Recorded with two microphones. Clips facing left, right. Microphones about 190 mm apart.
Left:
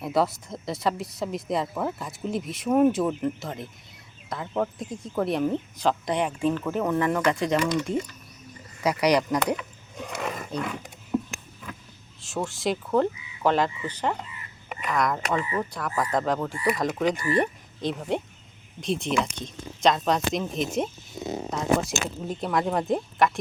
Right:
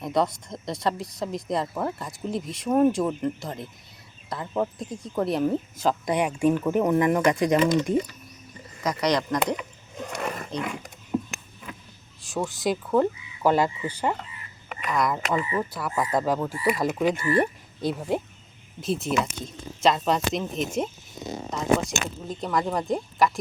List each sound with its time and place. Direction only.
0.0 s speech: 5° left (ahead or behind); by 8.0 s 20° right (ahead or behind)
8.8 s speech: 10° left (ahead or behind)
9.6 s roaring cats: centre (ahead or behind)
12.3 s speech: centre (ahead or behind)
14.7 s speech: centre (ahead or behind)
21.2 s a sound: 5° left (ahead or behind)
22.3 s speech: 5° left (ahead or behind)